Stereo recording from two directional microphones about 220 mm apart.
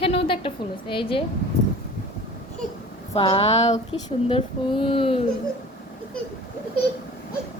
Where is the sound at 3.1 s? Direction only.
25° left (ahead or behind).